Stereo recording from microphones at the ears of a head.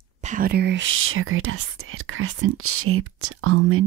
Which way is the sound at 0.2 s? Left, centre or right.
Right.